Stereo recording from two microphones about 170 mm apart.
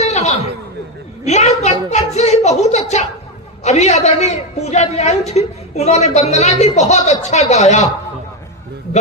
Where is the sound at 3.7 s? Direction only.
40° left (ahead or behind).